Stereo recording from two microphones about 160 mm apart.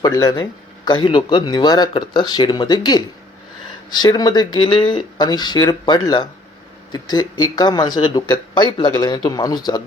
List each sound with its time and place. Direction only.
0.0 s speech: 25° left (ahead or behind)